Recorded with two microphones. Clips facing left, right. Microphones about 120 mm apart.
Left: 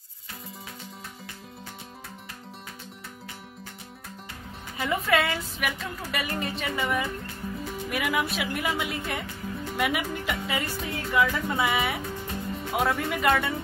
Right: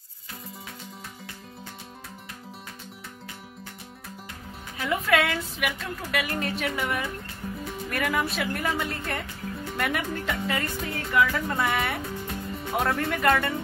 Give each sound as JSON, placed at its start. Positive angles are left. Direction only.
{"t": 4.7, "sound": "a woman's voice", "side_deg": 0}